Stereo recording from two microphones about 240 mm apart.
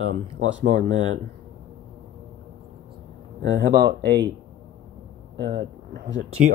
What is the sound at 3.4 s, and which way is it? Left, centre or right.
Speech, right.